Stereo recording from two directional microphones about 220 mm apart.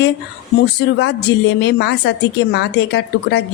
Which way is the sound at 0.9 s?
50° left (ahead or behind).